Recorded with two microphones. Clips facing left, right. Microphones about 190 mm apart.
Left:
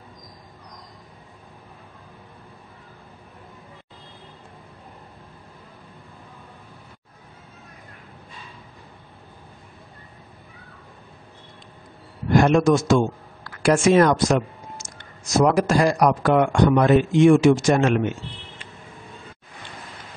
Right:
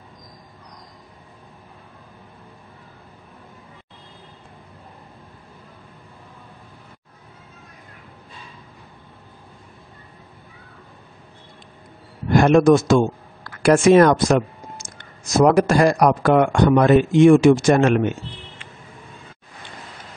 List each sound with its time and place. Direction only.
12.4 s speech: 55° right (ahead or behind)
13.6 s a sound: 60° right (ahead or behind)
15.6 s speech: 60° right (ahead or behind)